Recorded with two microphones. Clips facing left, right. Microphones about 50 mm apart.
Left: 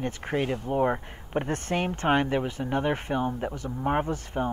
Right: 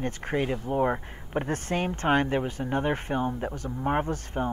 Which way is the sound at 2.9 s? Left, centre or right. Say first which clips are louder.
Even; left.